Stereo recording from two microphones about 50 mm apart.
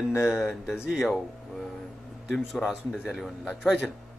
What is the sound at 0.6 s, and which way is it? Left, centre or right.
Speech, centre.